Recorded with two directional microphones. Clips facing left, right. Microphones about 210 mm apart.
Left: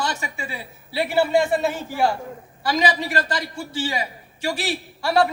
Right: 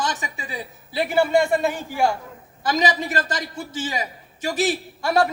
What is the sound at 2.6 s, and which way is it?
A man's voice, 20° right (ahead or behind).